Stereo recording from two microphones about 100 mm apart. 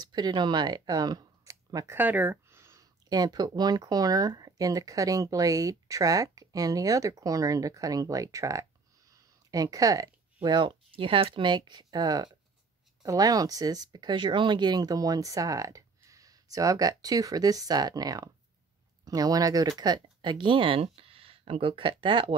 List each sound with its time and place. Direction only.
0.1 s speech: 45° right (ahead or behind)
2.0 s speech: 15° right (ahead or behind)
2.6 s speech: 35° right (ahead or behind); by 22.3 s 55° right (ahead or behind)